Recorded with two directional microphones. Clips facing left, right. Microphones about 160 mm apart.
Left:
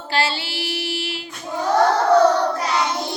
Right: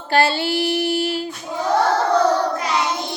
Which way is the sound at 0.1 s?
50° right (ahead or behind).